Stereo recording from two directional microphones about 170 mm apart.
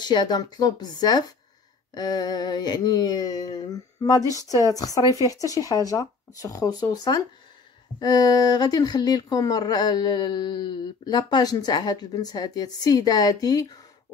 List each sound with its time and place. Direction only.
0.0 s speech: 25° left (ahead or behind)